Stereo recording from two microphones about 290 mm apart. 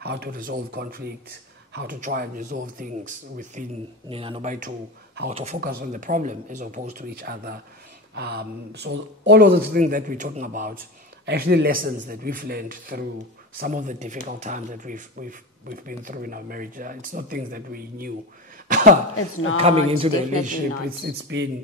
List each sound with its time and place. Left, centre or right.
0.0 s a man's voice: right
19.1 s speech: left
19.5 s speech: centre
21.0 s a man's voice: right